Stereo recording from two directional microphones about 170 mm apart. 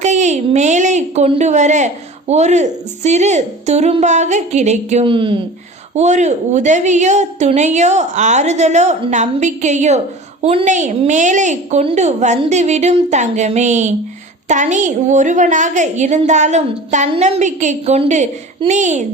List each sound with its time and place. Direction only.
0.0 s a woman's voice: 45° right (ahead or behind)
5.9 s a woman's voice: 40° right (ahead or behind)